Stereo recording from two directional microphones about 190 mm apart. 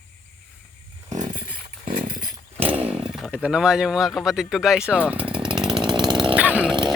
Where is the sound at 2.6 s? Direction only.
10° right (ahead or behind).